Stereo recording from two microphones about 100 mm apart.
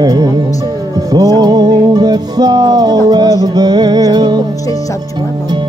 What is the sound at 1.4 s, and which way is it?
Music, 40° right (ahead or behind).